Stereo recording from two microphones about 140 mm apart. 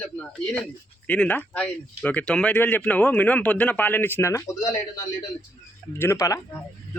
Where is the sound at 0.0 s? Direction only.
10° left (ahead or behind).